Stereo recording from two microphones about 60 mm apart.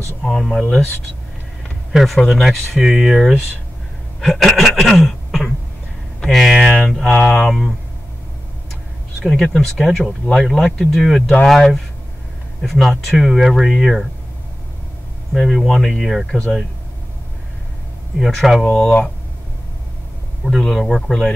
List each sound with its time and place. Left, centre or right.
0.2 s speech: centre
1.9 s speech: centre
9.2 s speech: centre
15.3 s speech: centre
18.2 s speech: centre
18.7 s speech: centre
20.4 s speech: centre